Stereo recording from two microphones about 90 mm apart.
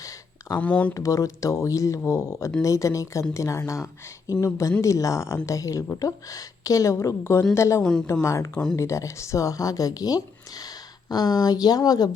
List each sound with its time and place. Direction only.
0.0 s a sound: 40° left (ahead or behind)
0.5 s speech: 15° left (ahead or behind)
0.9 s a woman's voice: 40° left (ahead or behind)
7.8 s speech: 10° left (ahead or behind)
8.2 s a woman's voice: 35° left (ahead or behind)